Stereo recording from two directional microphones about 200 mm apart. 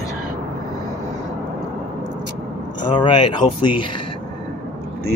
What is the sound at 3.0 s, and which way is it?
Speech, 25° left (ahead or behind).